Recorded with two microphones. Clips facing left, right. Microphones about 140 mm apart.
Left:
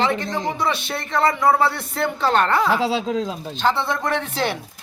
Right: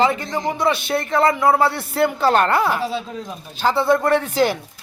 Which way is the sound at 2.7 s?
90° left.